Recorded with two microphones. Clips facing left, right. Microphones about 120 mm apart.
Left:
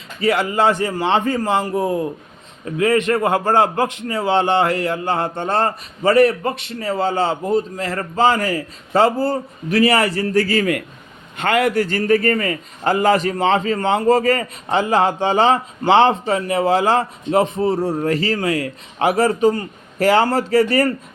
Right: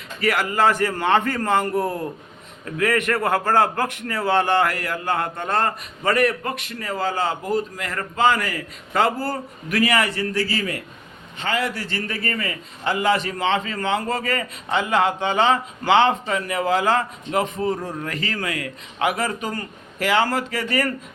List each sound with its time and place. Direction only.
0.2 s a man's voice: 25° left (ahead or behind)